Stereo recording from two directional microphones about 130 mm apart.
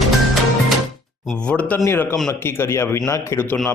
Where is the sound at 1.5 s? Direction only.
10° left (ahead or behind).